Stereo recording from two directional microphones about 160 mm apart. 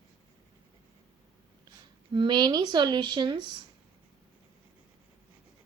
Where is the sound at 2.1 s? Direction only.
30° right (ahead or behind).